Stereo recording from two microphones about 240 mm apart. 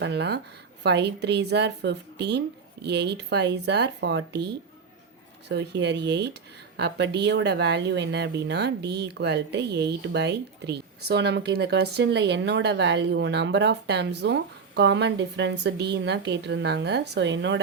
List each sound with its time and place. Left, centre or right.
0.0 s speech: right
5.5 s speech: right